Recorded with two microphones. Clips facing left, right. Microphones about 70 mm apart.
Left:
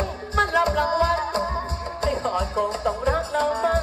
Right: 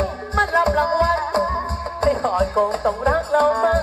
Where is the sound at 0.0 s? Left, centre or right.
Right.